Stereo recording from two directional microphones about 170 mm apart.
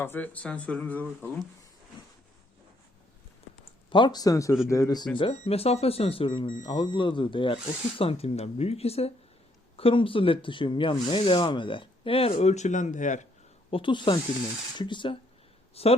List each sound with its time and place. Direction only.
0.0 s speech: 10° left (ahead or behind)
3.8 s speech: 30° left (ahead or behind)
5.1 s speech: 35° left (ahead or behind)
13.7 s speech: 30° left (ahead or behind)